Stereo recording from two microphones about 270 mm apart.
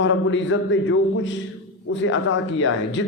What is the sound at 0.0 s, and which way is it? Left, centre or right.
A man's voice, left.